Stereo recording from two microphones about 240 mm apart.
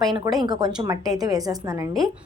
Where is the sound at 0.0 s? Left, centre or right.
Centre.